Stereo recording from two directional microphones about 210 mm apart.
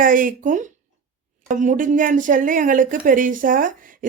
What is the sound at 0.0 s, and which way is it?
A woman's voice, 40° right (ahead or behind).